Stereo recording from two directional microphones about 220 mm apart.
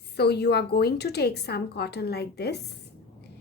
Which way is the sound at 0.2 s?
50° left (ahead or behind).